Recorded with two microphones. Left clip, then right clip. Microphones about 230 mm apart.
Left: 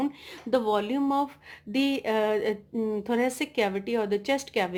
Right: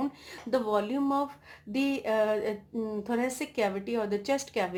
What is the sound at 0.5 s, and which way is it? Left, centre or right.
A woman's voice, left.